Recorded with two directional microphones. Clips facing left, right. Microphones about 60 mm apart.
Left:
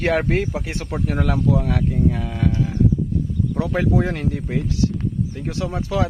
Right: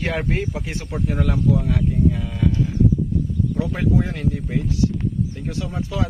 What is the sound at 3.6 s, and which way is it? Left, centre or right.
Speech, left.